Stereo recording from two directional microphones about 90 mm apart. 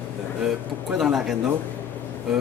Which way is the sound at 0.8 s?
5° right (ahead or behind).